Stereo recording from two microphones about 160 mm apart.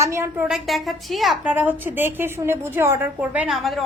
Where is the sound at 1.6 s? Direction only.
10° right (ahead or behind).